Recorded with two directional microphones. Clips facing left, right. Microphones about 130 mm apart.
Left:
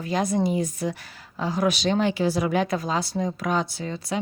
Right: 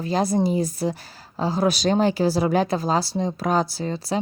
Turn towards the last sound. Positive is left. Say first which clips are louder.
# right 4 dB
turn(degrees=-35)  # may be behind; listen again after turning